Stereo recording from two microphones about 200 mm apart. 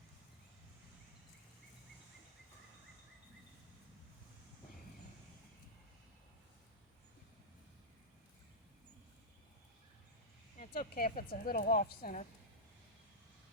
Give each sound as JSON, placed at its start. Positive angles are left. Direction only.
{"t": 10.6, "sound": "speech", "side_deg": 45}